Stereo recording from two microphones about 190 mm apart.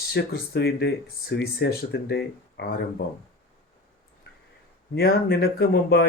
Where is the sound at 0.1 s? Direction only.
60° left (ahead or behind).